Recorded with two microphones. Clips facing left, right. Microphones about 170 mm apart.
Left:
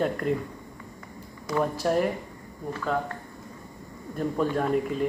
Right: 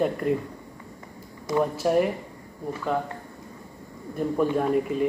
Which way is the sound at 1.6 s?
5° right (ahead or behind).